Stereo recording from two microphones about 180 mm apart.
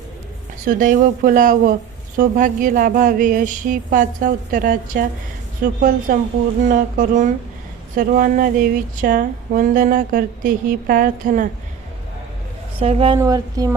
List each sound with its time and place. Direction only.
0.6 s a sound: 50° right (ahead or behind)
12.8 s a woman's voice: 35° right (ahead or behind)
13.1 s speech: 20° right (ahead or behind)